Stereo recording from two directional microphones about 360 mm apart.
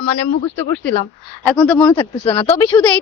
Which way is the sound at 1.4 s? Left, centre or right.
Centre.